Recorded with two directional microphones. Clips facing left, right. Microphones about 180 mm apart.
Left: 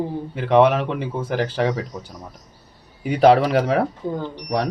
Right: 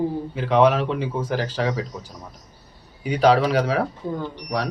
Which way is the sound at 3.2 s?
50° left (ahead or behind).